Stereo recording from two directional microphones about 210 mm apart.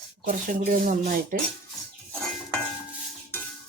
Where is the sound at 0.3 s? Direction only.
40° right (ahead or behind).